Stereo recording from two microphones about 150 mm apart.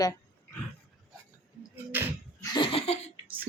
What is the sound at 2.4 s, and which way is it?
Laughter, 30° left (ahead or behind).